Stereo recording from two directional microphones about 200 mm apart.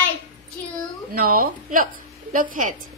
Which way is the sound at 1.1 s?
45° right (ahead or behind).